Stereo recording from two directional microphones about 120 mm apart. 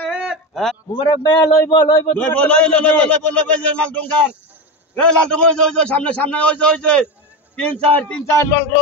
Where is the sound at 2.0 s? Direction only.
10° left (ahead or behind).